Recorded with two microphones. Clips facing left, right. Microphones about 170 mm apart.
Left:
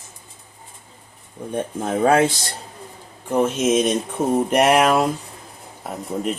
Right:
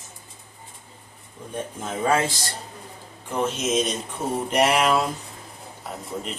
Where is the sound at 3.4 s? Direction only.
55° left (ahead or behind).